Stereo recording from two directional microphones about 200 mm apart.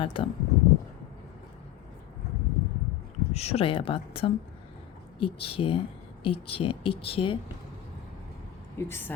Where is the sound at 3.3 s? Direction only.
30° left (ahead or behind).